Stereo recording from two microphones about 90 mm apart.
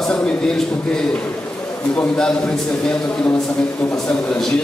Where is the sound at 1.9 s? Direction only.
15° left (ahead or behind).